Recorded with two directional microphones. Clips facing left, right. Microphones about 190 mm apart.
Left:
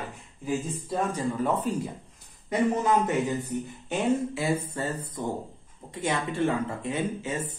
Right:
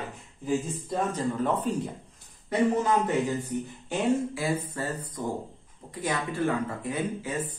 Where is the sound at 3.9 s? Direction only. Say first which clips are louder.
Even; 25° left (ahead or behind).